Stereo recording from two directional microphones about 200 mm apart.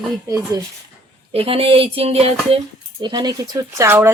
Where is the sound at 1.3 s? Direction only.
30° right (ahead or behind).